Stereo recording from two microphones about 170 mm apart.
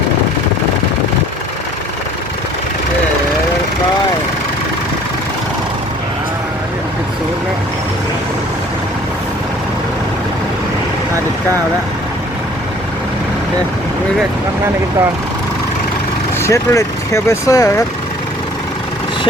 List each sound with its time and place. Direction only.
16.4 s speech: 15° left (ahead or behind)